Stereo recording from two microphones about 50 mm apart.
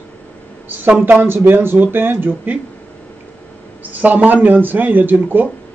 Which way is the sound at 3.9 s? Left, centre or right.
Right.